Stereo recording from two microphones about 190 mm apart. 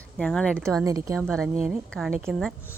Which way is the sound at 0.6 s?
20° right (ahead or behind).